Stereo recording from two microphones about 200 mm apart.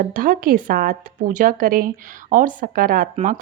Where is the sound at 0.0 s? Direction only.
45° right (ahead or behind).